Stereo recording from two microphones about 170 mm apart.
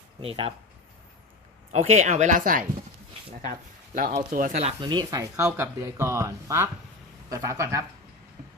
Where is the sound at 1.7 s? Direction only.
40° right (ahead or behind).